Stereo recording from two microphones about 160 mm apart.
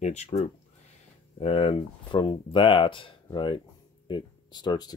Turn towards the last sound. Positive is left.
turn(degrees=25)  # may be behind; listen again after turning